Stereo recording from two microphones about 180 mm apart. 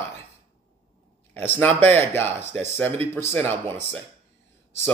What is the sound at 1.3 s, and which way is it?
Speech, 10° left (ahead or behind).